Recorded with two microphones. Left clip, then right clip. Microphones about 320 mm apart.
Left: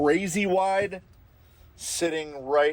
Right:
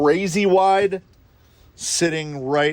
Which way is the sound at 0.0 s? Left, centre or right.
Right.